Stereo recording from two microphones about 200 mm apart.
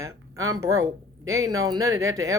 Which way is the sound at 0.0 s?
15° right (ahead or behind).